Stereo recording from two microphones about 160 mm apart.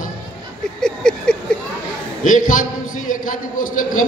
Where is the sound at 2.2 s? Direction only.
55° left (ahead or behind).